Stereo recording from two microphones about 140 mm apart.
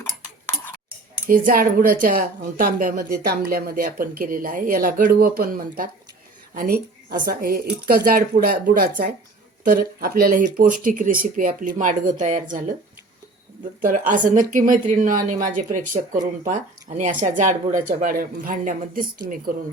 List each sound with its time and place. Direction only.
0.0 s tick-tock: 15° left (ahead or behind)
1.3 s a woman's voice: 85° right; by 12.6 s 65° right (ahead or behind)
14.1 s a woman's voice: 65° right (ahead or behind); by 19.0 s 85° right